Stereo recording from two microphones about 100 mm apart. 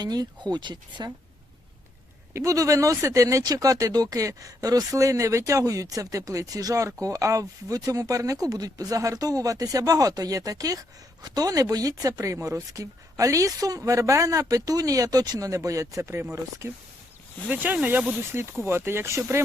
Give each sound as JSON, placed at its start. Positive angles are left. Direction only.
{"t": 0.0, "sound": "speech", "side_deg": -40}
{"t": 2.3, "sound": "speech", "side_deg": -35}
{"t": 17.5, "sound": "speech", "side_deg": -20}